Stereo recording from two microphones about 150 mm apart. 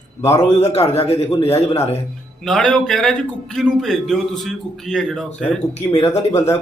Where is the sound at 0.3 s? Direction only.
50° left (ahead or behind).